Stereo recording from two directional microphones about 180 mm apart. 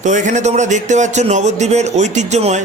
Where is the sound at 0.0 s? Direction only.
45° right (ahead or behind).